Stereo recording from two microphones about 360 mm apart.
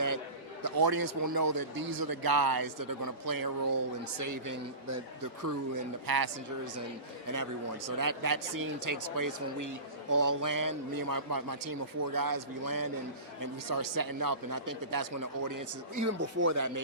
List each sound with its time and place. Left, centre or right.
0.6 s a man's voice: right
7.9 s a man's voice: right
16.1 s speech: right